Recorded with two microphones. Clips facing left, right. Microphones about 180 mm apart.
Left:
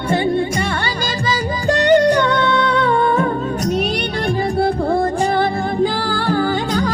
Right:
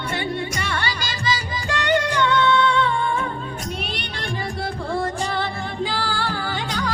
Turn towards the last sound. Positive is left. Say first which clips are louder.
# left 8 dB
turn(degrees=45)  # may be behind; listen again after turning